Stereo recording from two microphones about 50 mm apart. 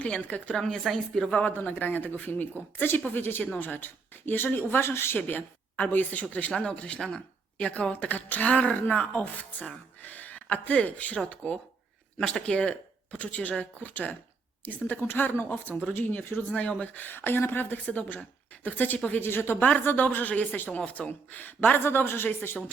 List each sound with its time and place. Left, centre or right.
0.0 s a woman's voice: left
0.5 s speech: centre
1.3 s speech: left
2.7 s speech: left
5.1 s a woman's voice: left
6.5 s a woman's voice: left
13.1 s speech: left
16.5 s speech: left
18.9 s a woman's voice: left
19.2 s a woman's voice: left